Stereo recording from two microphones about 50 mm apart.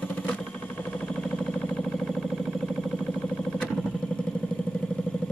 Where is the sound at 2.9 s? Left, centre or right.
Centre.